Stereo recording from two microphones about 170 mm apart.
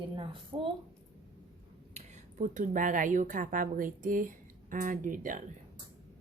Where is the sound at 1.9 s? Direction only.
45° right (ahead or behind).